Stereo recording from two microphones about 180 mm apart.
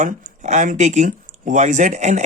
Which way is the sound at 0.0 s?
45° right (ahead or behind).